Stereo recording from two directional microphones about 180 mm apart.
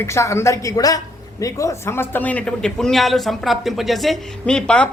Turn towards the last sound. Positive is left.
turn(degrees=5)  # may be behind; listen again after turning